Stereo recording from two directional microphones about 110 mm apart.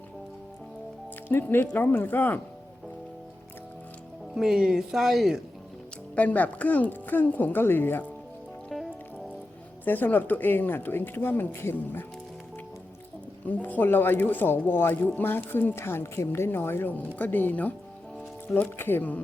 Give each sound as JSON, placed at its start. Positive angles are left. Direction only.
{"t": 1.3, "sound": "speech", "side_deg": 20}
{"t": 4.4, "sound": "speech", "side_deg": -5}
{"t": 6.1, "sound": "speech", "side_deg": 15}
{"t": 8.7, "sound": "music", "side_deg": 0}
{"t": 9.8, "sound": "speech", "side_deg": 15}
{"t": 13.4, "sound": "speech", "side_deg": 15}